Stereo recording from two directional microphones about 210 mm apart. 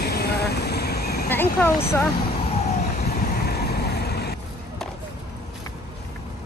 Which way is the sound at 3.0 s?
45° left (ahead or behind).